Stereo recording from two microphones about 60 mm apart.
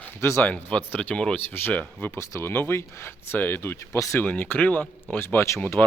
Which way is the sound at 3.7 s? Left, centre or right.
Left.